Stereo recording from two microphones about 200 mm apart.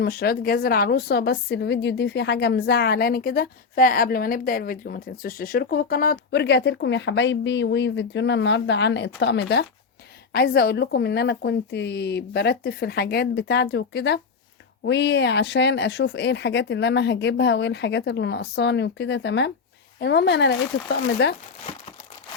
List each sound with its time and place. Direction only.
0.0 s a woman's voice: 50° left (ahead or behind)